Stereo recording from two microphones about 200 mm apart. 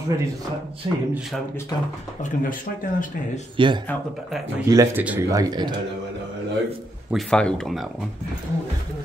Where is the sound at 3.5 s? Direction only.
25° right (ahead or behind).